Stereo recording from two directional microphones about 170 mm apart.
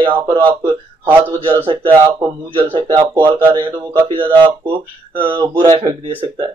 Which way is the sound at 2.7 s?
30° right (ahead or behind).